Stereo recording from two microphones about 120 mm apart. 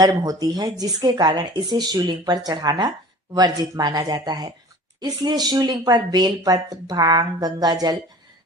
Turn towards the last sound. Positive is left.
turn(degrees=-35)  # may be behind; listen again after turning